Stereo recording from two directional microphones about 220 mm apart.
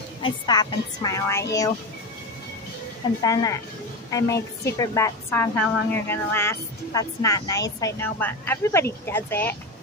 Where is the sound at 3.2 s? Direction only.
15° left (ahead or behind).